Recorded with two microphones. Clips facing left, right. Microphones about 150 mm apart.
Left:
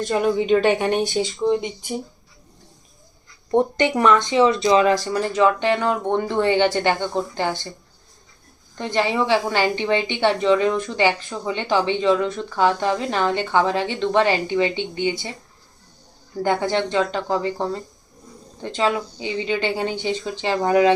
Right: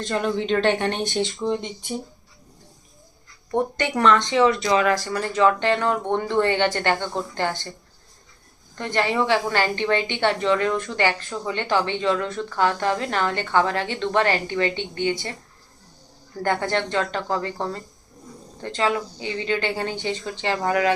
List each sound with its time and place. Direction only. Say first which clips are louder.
0.0 s a woman's voice: left 4 dB; 10° left (ahead or behind)
3.5 s a woman's voice: left 5 dB; 20° left (ahead or behind)
8.8 s a woman's voice: left 1 dB; 15° left (ahead or behind)
16.3 s a woman's voice: left 3 dB; 10° left (ahead or behind)